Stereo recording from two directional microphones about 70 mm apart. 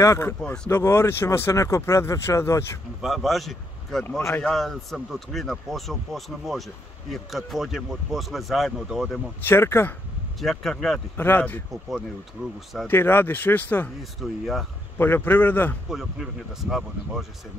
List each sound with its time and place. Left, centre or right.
0.0 s speech: left
3.0 s speech: centre
9.4 s speech: left
10.4 s speech: centre
11.1 s speech: left
12.8 s speech: left
14.2 s speech: centre
15.0 s speech: left
15.9 s speech: centre